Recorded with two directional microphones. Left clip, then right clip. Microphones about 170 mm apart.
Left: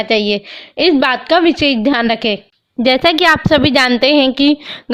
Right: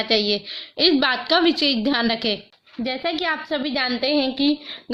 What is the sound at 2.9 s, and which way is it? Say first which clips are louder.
A woman's voice: left 14 dB; 65° left (ahead or behind).